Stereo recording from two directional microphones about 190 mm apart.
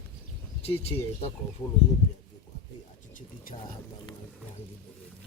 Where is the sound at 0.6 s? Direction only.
30° left (ahead or behind).